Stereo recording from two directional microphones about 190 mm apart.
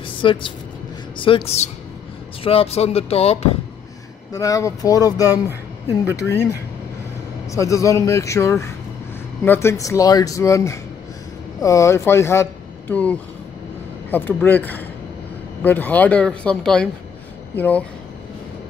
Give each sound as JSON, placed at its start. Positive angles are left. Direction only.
{"t": 0.0, "sound": "a sound", "side_deg": 25}
{"t": 1.1, "sound": "speech", "side_deg": 25}
{"t": 4.3, "sound": "speech", "side_deg": 20}
{"t": 7.4, "sound": "speech", "side_deg": 15}